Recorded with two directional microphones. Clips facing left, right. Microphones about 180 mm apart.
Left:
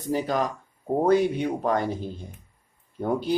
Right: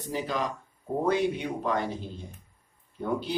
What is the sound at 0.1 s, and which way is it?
Speech, 45° left (ahead or behind).